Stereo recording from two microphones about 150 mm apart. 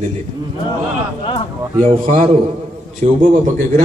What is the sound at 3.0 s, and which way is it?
Speech, 50° right (ahead or behind).